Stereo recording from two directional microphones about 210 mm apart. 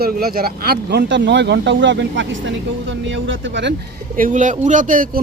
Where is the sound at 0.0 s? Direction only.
45° right (ahead or behind).